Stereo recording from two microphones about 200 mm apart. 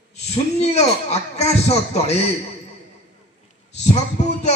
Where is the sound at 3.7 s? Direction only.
35° left (ahead or behind).